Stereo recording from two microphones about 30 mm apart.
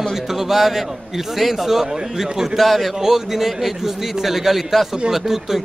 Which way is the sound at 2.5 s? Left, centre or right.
Centre.